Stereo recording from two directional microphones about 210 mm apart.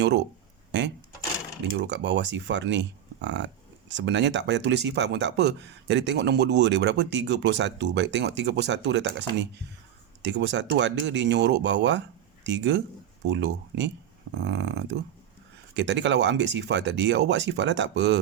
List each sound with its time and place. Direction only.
1.7 s speech: 60° right (ahead or behind)